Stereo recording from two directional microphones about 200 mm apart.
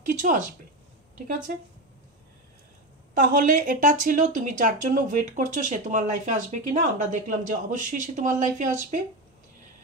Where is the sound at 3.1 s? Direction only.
40° right (ahead or behind).